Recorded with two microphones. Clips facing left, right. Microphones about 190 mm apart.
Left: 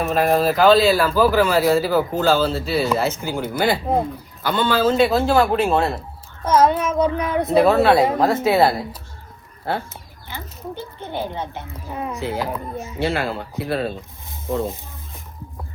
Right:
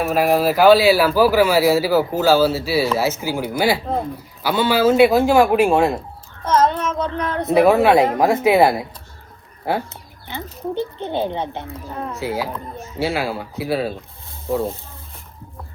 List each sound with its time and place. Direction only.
0.0 s a man's voice: centre (ahead or behind)
6.4 s child singing: 10° left (ahead or behind)
7.4 s speech: 10° right (ahead or behind)
10.2 s speech: 20° right (ahead or behind)
11.9 s speech: 10° left (ahead or behind)
12.2 s a man's voice: centre (ahead or behind)